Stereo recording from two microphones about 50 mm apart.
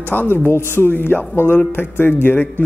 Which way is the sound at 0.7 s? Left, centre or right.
Left.